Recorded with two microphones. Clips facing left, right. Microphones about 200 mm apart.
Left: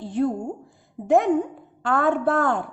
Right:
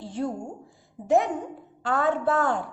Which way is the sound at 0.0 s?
55° left (ahead or behind).